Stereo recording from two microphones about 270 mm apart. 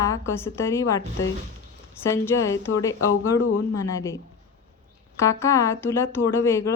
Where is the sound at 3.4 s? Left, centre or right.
Left.